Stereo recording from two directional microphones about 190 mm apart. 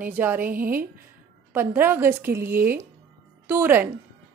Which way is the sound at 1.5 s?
10° right (ahead or behind).